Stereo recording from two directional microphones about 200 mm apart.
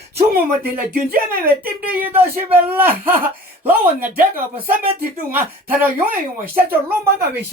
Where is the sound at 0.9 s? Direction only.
50° right (ahead or behind).